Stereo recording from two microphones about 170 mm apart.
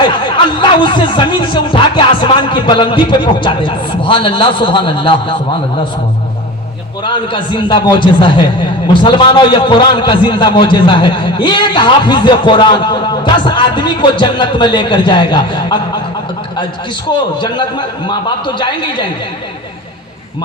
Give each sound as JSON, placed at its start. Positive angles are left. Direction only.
{"t": 0.0, "sound": "a man's voice", "side_deg": 25}
{"t": 7.0, "sound": "a man's voice", "side_deg": 30}
{"t": 17.3, "sound": "a man's voice", "side_deg": 25}